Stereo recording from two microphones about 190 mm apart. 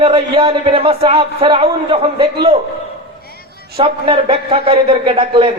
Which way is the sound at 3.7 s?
30° right (ahead or behind).